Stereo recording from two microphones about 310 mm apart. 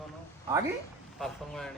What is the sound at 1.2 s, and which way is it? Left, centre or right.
Speech, centre.